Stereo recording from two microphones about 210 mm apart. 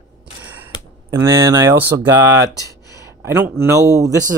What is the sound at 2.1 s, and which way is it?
Speech, 10° right (ahead or behind).